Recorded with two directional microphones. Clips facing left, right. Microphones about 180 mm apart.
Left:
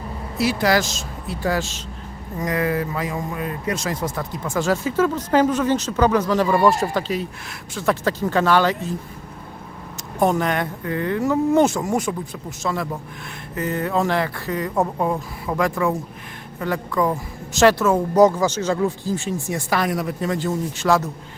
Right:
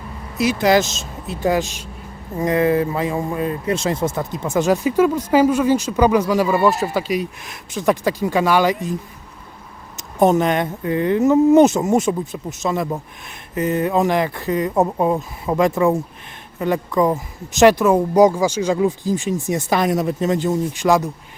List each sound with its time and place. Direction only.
0.3 s speech: 20° right (ahead or behind)
10.0 s speech: 20° right (ahead or behind)